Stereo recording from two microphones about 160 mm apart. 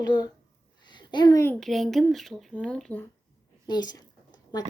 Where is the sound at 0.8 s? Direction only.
30° left (ahead or behind).